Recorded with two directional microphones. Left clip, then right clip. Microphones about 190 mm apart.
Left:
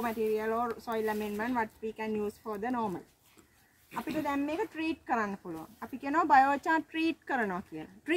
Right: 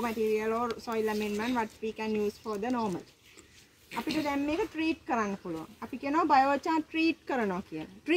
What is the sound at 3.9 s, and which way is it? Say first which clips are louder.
Speech: right 2 dB; 50° left (ahead or behind).